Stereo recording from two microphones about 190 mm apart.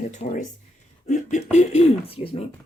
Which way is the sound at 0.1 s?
40° left (ahead or behind).